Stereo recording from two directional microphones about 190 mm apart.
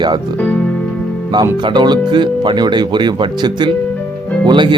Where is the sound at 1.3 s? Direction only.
20° right (ahead or behind).